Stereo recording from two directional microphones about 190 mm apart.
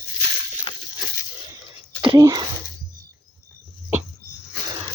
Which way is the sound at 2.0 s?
20° right (ahead or behind).